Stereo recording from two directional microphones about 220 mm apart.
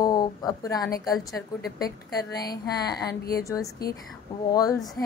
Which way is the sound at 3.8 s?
45° left (ahead or behind).